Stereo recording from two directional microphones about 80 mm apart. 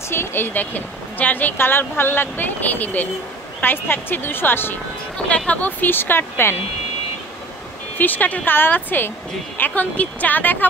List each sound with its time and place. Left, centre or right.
0.1 s a woman's voice: left
8.0 s a woman's voice: left